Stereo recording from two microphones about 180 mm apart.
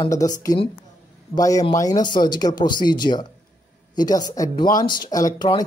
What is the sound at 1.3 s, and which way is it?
Speech, 20° left (ahead or behind).